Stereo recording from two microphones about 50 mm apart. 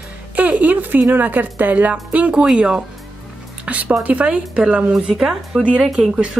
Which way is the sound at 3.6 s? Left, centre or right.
Right.